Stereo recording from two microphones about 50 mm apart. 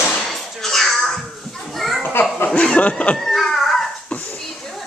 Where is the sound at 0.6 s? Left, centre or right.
Centre.